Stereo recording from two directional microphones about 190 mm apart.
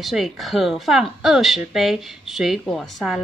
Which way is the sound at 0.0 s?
Centre (ahead or behind).